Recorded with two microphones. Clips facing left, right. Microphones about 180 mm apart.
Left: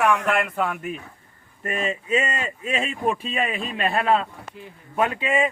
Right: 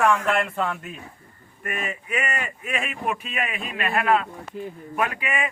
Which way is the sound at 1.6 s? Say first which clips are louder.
Left 4 dB; 30° left (ahead or behind).